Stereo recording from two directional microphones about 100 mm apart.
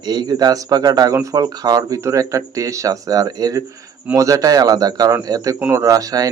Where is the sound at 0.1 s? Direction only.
45° right (ahead or behind).